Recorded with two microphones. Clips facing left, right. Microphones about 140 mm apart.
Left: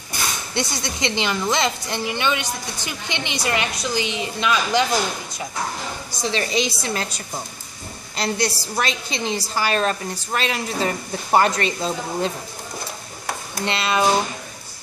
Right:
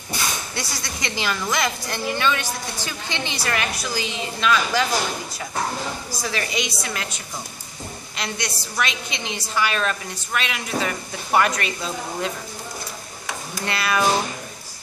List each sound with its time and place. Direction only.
0.6 s a woman's voice: 25° left (ahead or behind)
6.2 s a woman's voice: 30° left (ahead or behind)
8.2 s a woman's voice: 35° left (ahead or behind)
13.7 s a woman's voice: 25° left (ahead or behind)